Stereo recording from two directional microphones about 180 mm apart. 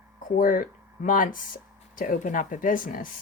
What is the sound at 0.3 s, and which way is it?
Speech, 50° left (ahead or behind).